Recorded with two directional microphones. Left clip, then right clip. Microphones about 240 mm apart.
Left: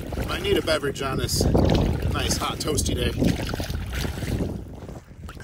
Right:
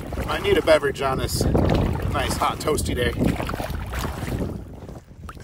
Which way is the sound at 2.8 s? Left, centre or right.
Right.